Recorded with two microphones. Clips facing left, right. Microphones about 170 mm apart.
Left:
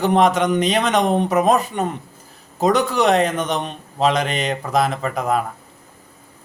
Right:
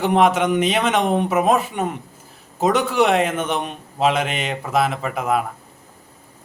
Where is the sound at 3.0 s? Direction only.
5° right (ahead or behind).